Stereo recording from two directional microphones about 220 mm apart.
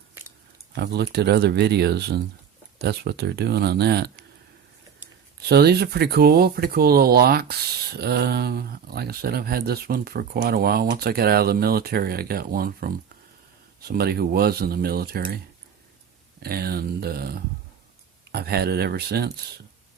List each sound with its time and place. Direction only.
0.8 s speech: 50° right (ahead or behind)
5.5 s speech: 45° right (ahead or behind)
16.4 s speech: 45° right (ahead or behind)